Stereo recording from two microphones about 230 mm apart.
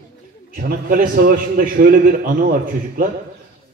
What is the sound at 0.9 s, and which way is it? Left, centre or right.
A man's voice, right.